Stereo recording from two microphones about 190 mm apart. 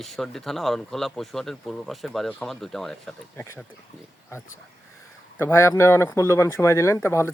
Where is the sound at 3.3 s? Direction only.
15° left (ahead or behind).